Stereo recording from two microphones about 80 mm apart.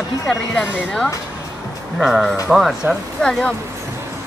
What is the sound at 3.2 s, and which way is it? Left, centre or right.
Speech, centre.